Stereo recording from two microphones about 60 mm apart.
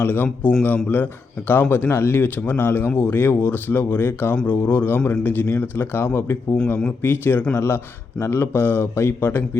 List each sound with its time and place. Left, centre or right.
0.0 s speech: left
1.9 s speech: left